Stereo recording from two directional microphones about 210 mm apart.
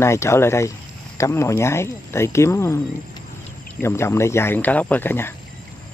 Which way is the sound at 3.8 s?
10° left (ahead or behind).